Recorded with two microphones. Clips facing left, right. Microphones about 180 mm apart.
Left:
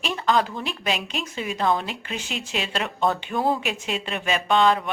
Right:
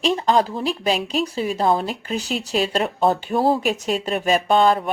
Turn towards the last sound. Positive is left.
turn(degrees=-40)  # may be behind; listen again after turning